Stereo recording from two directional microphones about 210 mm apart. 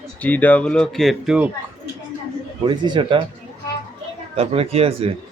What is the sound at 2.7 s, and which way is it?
Speech, 20° right (ahead or behind).